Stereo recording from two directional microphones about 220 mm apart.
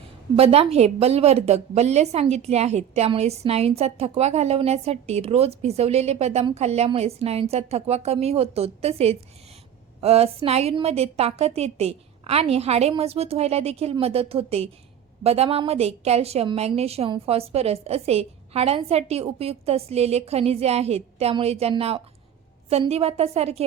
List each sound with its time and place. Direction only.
0.3 s a woman's voice: 25° right (ahead or behind)